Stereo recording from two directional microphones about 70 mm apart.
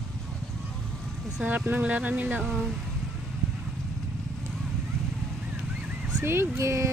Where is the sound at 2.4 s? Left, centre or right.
Centre.